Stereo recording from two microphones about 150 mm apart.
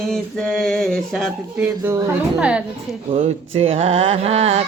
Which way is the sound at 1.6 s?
20° right (ahead or behind).